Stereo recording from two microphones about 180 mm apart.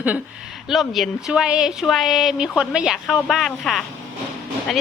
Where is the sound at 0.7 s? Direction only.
Centre (ahead or behind).